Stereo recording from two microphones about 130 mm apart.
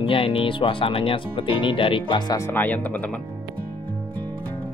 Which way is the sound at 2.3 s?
15° left (ahead or behind).